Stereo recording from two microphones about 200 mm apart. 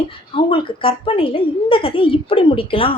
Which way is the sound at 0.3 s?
25° left (ahead or behind).